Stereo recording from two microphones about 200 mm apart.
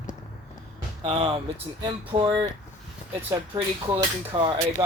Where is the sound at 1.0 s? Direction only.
25° right (ahead or behind).